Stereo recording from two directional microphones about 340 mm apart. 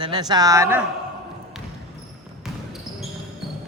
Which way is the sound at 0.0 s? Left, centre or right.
Centre.